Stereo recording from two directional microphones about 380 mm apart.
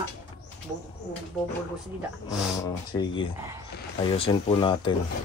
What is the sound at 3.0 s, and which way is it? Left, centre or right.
Speech, centre.